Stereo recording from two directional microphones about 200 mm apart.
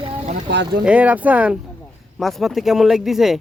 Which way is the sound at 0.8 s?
5° right (ahead or behind).